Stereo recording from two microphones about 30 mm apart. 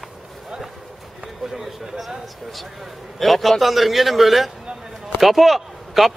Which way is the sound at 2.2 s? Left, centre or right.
Centre.